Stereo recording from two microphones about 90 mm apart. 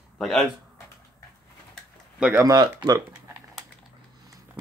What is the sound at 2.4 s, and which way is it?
Speech, 45° right (ahead or behind).